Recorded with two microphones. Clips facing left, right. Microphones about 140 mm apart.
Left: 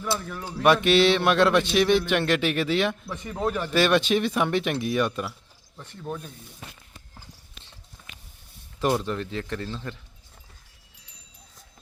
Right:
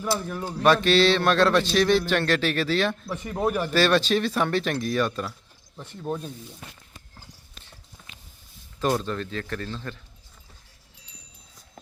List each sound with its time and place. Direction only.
0.3 s a sound: 25° right (ahead or behind)
0.7 s speech: 20° left (ahead or behind)
3.1 s a man's voice: 15° right (ahead or behind)
3.7 s speech: 20° left (ahead or behind)
5.7 s a man's voice: 15° right (ahead or behind)
8.8 s speech: 20° left (ahead or behind)